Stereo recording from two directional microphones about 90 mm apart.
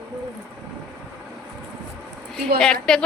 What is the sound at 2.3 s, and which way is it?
Speech, 5° left (ahead or behind).